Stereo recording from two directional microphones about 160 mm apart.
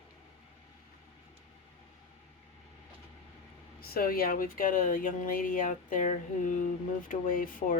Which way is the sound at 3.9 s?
65° left (ahead or behind).